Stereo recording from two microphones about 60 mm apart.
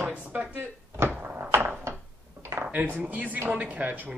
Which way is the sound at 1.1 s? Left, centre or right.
Right.